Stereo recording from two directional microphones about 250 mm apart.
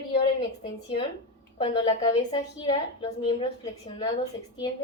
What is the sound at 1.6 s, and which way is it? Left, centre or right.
A woman's voice, left.